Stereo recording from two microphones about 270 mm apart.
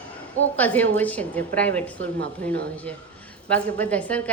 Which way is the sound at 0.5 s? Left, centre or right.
Centre.